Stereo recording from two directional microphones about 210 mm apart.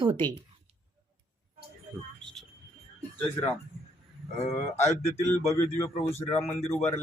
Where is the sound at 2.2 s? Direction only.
Centre (ahead or behind).